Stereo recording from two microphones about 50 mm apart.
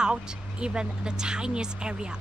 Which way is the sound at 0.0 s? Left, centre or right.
Centre.